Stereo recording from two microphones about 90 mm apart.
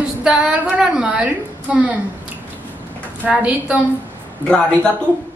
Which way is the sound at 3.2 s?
15° right (ahead or behind).